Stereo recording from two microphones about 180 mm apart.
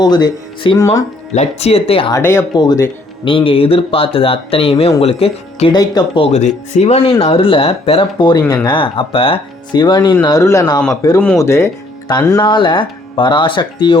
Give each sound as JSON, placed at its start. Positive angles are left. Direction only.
{"t": 0.0, "sound": "speech", "side_deg": 20}
{"t": 1.3, "sound": "speech", "side_deg": 35}
{"t": 2.1, "sound": "speech", "side_deg": 15}